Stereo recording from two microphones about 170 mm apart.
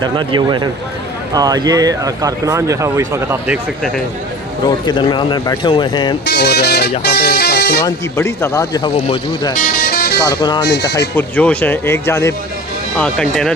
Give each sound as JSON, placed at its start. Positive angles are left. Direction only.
{"t": 0.0, "sound": "speech", "side_deg": -25}
{"t": 4.9, "sound": "speech", "side_deg": 25}
{"t": 6.2, "sound": "speech", "side_deg": 75}
{"t": 7.0, "sound": "music", "side_deg": 75}
{"t": 7.9, "sound": "speech", "side_deg": 15}
{"t": 9.6, "sound": "music", "side_deg": 60}
{"t": 10.2, "sound": "speech", "side_deg": 25}
{"t": 10.7, "sound": "speech", "side_deg": 85}
{"t": 11.2, "sound": "speech", "side_deg": 10}
{"t": 13.0, "sound": "speech", "side_deg": 5}